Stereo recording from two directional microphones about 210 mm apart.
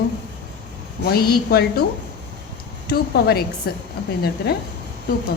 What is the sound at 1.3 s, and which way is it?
Speech, 50° left (ahead or behind).